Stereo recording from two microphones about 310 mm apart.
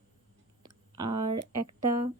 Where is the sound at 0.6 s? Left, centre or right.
Centre.